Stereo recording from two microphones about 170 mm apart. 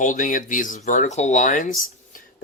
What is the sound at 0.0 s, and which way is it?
Speech, 50° left (ahead or behind).